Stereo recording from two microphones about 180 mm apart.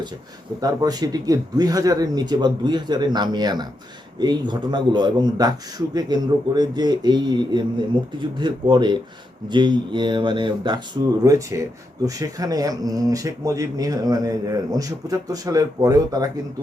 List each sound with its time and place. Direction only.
0.6 s speech: 20° right (ahead or behind)